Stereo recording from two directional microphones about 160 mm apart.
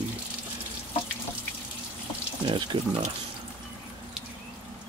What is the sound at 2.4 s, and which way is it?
Speech, 40° right (ahead or behind).